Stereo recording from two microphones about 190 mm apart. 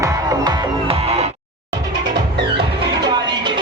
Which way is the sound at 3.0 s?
25° right (ahead or behind).